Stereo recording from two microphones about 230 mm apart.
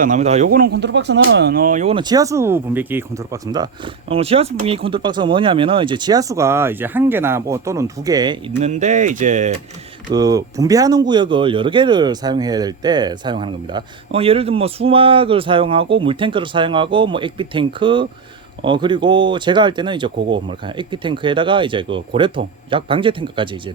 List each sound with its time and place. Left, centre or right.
0.0 s speech: right
8.6 s speech: right
10.1 s speech: centre